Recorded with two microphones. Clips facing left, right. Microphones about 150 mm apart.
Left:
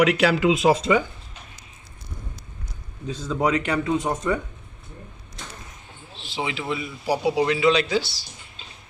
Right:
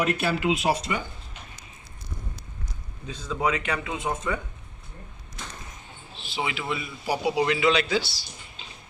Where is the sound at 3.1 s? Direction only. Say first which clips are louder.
Left 4 dB; 35° left (ahead or behind).